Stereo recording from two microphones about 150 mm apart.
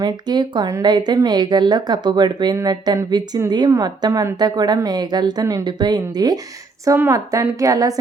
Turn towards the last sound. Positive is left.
turn(degrees=-25)  # may be behind; listen again after turning